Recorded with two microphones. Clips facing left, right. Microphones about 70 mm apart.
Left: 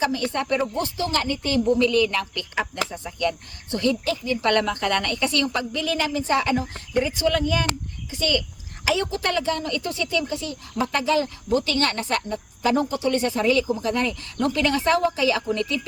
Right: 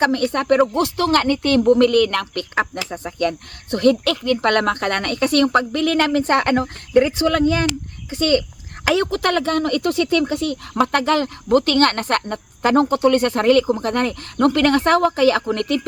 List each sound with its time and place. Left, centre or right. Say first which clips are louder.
0.0 s speech: right 6 dB; right